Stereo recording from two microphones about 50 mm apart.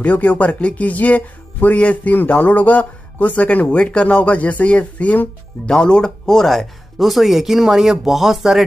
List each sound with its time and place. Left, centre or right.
0.0 s speech: left
5.7 s speech: centre